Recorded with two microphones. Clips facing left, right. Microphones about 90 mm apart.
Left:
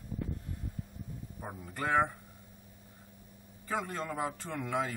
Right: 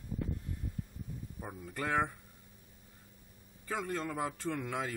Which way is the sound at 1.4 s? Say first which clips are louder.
Left 2 dB; 30° left (ahead or behind).